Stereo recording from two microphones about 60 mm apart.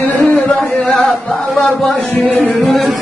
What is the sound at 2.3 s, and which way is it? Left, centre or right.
Music, left.